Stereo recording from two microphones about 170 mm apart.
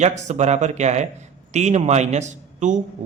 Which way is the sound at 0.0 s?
45° right (ahead or behind).